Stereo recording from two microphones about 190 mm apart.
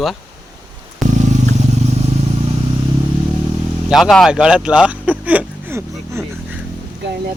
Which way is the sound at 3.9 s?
Centre (ahead or behind).